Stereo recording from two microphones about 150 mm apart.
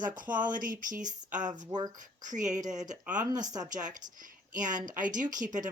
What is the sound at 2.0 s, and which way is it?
Speech, 55° right (ahead or behind).